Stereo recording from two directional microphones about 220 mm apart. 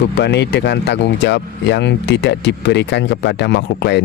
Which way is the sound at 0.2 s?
50° left (ahead or behind).